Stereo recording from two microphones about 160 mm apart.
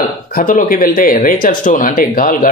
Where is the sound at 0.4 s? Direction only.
60° left (ahead or behind).